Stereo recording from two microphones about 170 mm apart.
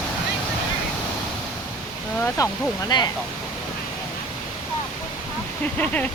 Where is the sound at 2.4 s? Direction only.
20° left (ahead or behind).